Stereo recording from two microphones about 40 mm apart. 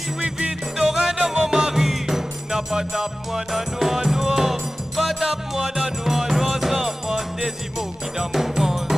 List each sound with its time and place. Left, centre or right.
0.2 s music: right
1.7 s music: centre
8.3 s music: centre